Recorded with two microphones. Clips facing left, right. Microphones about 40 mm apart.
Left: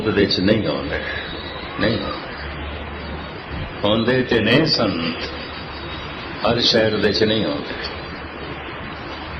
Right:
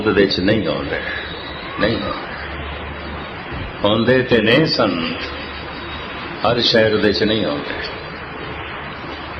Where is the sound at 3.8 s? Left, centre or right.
Centre.